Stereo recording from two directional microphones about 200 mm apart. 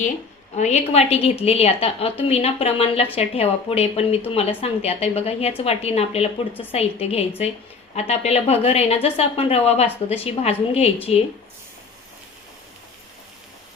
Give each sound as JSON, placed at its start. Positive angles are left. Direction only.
{"t": 0.5, "sound": "a woman's voice", "side_deg": 35}